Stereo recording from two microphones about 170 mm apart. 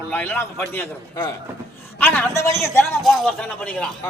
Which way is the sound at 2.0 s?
10° left (ahead or behind).